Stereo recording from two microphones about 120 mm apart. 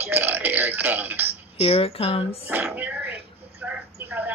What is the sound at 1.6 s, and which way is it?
Speech, 55° left (ahead or behind).